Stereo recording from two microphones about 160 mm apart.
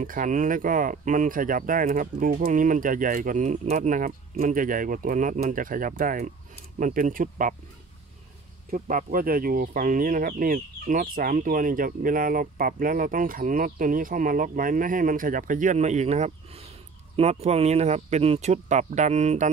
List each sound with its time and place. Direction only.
0.0 s speech: 55° right (ahead or behind)
8.6 s speech: 60° right (ahead or behind)